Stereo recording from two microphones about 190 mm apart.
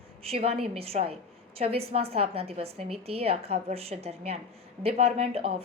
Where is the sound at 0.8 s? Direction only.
30° right (ahead or behind).